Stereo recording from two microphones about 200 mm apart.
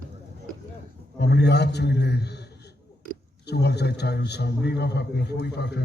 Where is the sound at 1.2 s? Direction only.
55° left (ahead or behind).